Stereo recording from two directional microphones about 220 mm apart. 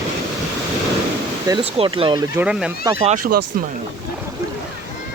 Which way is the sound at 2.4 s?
5° right (ahead or behind).